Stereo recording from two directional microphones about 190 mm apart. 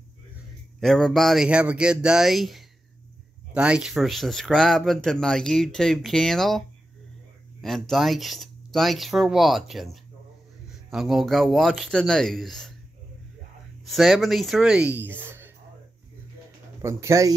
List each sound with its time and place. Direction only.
0.7 s speech: centre (ahead or behind)
7.6 s speech: centre (ahead or behind)
13.8 s speech: centre (ahead or behind)
16.8 s speech: 15° right (ahead or behind)